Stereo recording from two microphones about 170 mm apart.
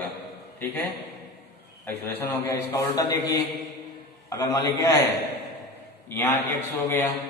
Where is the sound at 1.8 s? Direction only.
10° left (ahead or behind).